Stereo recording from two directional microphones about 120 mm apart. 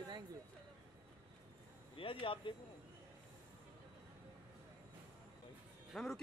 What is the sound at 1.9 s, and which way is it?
Speech, 50° left (ahead or behind).